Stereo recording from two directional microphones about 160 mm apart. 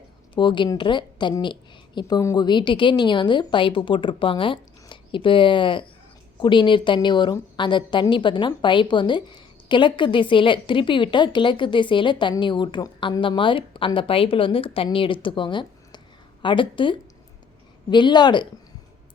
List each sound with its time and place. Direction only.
0.3 s a woman's voice: 30° left (ahead or behind)